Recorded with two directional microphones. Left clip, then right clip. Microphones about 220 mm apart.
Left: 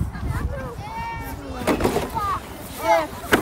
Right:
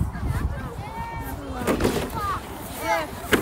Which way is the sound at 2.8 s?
15° left (ahead or behind).